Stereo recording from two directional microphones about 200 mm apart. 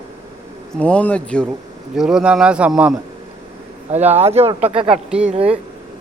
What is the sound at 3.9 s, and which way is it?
Speech, 30° right (ahead or behind).